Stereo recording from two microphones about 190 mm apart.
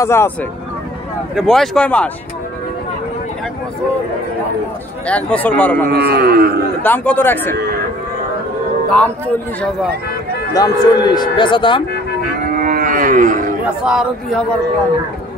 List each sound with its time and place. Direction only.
0.0 s speech: 15° left (ahead or behind)
1.3 s speech: centre (ahead or behind)
5.0 s speech: 5° left (ahead or behind)
5.9 s speech: 55° right (ahead or behind)
6.8 s speech: 10° left (ahead or behind)
8.8 s speech: 5° left (ahead or behind)
10.5 s speech: 20° left (ahead or behind)
12.5 s livestock: 45° right (ahead or behind)
13.8 s speech: centre (ahead or behind)